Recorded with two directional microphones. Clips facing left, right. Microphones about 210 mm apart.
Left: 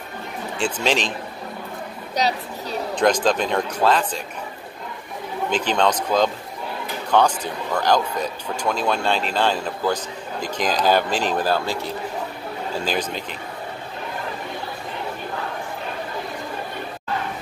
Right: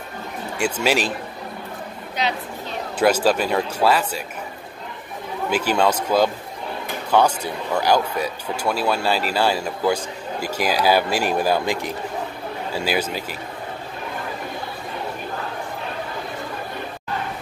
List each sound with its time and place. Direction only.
0.6 s speech: 10° right (ahead or behind)
2.2 s speech: 40° left (ahead or behind)
2.9 s speech: 5° right (ahead or behind)
5.5 s speech: 10° right (ahead or behind)